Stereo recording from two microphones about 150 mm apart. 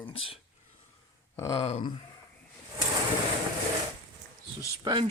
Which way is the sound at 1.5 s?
45° left (ahead or behind).